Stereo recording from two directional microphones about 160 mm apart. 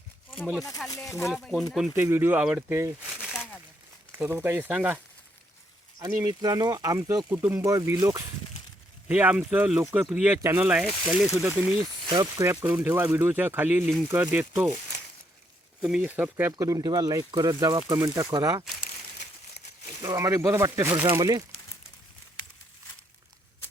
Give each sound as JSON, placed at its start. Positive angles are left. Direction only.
{"t": 0.9, "sound": "speech", "side_deg": 20}
{"t": 1.2, "sound": "speech", "side_deg": 0}
{"t": 2.0, "sound": "speech", "side_deg": -15}
{"t": 3.2, "sound": "a sound", "side_deg": -5}
{"t": 4.2, "sound": "speech", "side_deg": -10}
{"t": 6.0, "sound": "speech", "side_deg": -25}
{"t": 11.3, "sound": "speech", "side_deg": -15}
{"t": 12.5, "sound": "speech", "side_deg": -10}
{"t": 15.8, "sound": "speech", "side_deg": -5}
{"t": 20.0, "sound": "speech", "side_deg": -20}
{"t": 20.9, "sound": "speech", "side_deg": -30}